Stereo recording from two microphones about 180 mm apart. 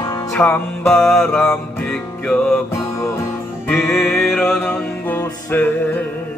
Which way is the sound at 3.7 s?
Centre (ahead or behind).